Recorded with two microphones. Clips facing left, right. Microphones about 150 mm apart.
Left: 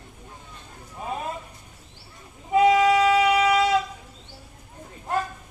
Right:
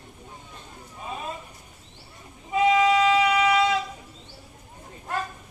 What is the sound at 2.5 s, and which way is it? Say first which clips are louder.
Music: left 2 dB; 50° left (ahead or behind).